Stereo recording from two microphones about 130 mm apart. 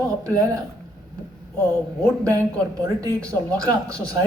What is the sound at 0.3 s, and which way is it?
Speech, 25° right (ahead or behind).